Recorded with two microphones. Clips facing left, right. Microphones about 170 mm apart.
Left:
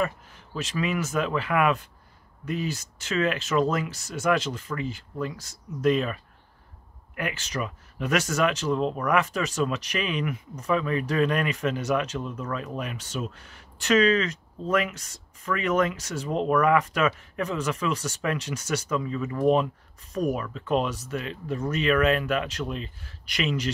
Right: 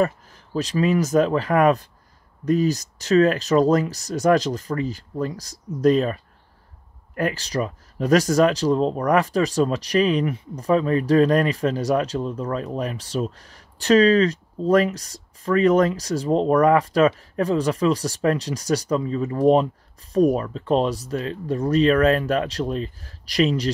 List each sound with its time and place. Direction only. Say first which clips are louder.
0.0 s speech: right 6 dB; 40° right (ahead or behind)